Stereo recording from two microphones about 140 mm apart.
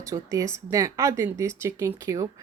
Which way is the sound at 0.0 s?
25° right (ahead or behind).